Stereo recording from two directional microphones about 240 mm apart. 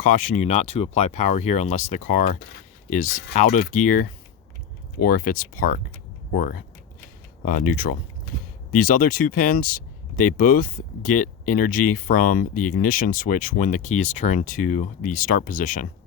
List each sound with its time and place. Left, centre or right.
0.0 s speech: left
7.4 s speech: left